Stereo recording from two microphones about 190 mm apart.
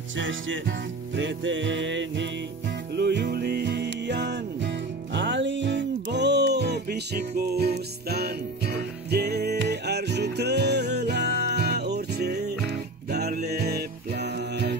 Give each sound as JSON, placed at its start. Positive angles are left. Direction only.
{"t": 0.2, "sound": "music", "side_deg": -80}
{"t": 3.0, "sound": "music", "side_deg": -65}